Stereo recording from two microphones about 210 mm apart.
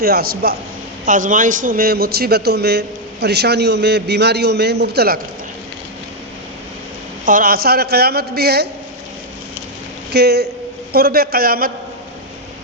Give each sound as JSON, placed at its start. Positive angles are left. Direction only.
{"t": 0.0, "sound": "a man's voice", "side_deg": -45}
{"t": 7.3, "sound": "a man's voice", "side_deg": -40}
{"t": 10.1, "sound": "a man's voice", "side_deg": -50}